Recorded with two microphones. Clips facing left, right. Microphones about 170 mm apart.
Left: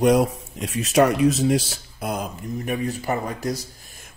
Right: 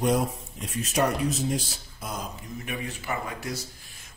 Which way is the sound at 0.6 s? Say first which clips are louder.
Left 8 dB; 90° left.